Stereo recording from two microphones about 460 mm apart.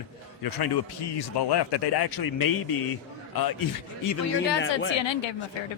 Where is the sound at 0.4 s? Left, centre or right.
Left.